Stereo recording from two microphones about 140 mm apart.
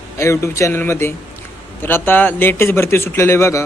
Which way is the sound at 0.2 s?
20° left (ahead or behind).